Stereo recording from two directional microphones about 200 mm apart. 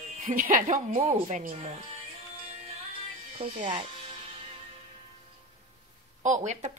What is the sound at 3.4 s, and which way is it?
Speech, 25° right (ahead or behind).